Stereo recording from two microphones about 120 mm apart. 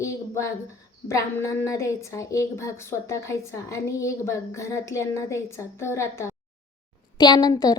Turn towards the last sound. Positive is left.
turn(degrees=30)  # may be behind; listen again after turning